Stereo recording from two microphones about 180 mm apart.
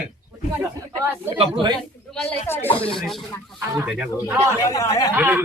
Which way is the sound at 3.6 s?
10° right (ahead or behind).